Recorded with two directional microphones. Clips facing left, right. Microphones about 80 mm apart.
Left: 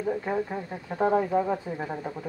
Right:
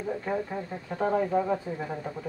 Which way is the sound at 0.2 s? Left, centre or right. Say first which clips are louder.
Left 2 dB; centre.